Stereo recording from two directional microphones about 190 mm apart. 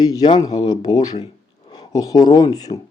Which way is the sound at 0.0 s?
20° left (ahead or behind).